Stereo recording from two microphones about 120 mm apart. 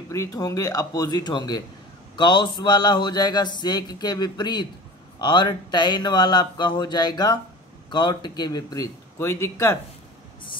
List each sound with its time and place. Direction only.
0.1 s speech: 30° left (ahead or behind)